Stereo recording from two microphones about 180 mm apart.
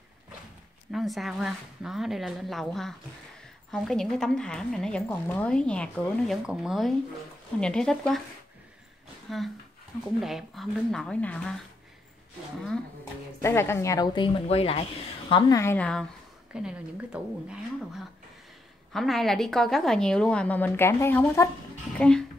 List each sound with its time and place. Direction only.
0.9 s a woman's voice: centre (ahead or behind)
9.3 s a woman's voice: centre (ahead or behind)
13.4 s a woman's voice: 15° left (ahead or behind)
16.5 s a woman's voice: 5° right (ahead or behind)